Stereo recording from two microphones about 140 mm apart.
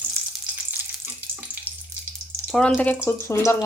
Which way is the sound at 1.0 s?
20° right (ahead or behind).